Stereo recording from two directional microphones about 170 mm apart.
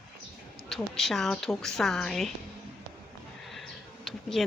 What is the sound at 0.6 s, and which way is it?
A woman's voice, centre (ahead or behind).